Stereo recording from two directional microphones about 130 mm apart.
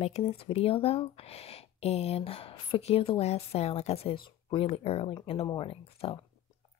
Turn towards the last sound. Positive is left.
turn(degrees=50)  # may be behind; listen again after turning